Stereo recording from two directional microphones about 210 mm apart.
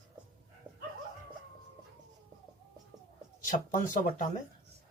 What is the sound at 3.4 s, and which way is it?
Speech, 40° left (ahead or behind).